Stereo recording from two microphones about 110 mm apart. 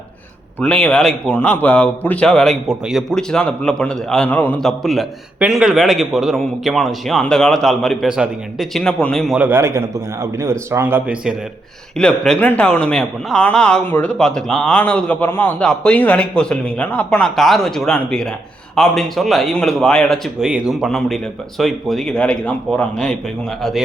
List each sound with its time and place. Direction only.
0.6 s a man's voice: 10° left (ahead or behind)
4.6 s a man's voice: centre (ahead or behind)
9.4 s a man's voice: 25° right (ahead or behind)
11.9 s a man's voice: 5° left (ahead or behind)